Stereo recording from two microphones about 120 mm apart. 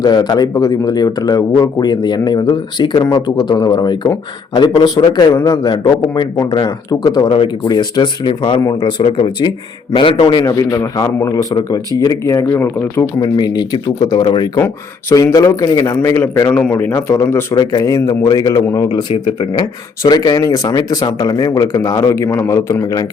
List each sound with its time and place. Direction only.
0.0 s a man's voice: 35° left (ahead or behind)
10.4 s a man's voice: 25° left (ahead or behind)
16.0 s a man's voice: 15° left (ahead or behind)
17.5 s speech: 35° left (ahead or behind)
20.0 s speech: 35° left (ahead or behind)